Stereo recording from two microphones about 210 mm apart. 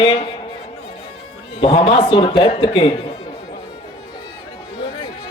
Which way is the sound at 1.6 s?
25° left (ahead or behind).